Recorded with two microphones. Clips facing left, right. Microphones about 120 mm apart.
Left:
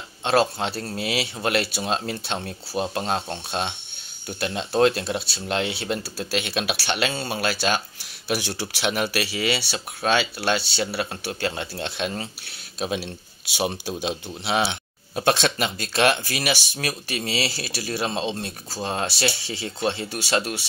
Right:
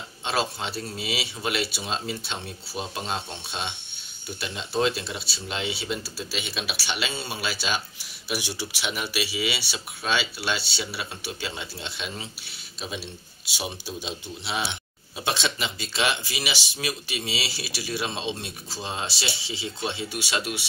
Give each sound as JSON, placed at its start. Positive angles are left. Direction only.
{"t": 0.2, "sound": "speech", "side_deg": 50}